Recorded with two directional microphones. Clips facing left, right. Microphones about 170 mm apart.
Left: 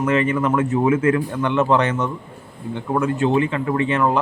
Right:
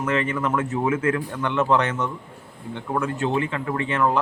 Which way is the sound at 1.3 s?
20° left (ahead or behind).